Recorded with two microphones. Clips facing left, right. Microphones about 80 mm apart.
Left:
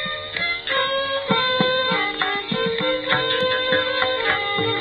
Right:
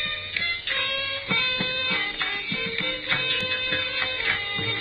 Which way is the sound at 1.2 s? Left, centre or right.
Left.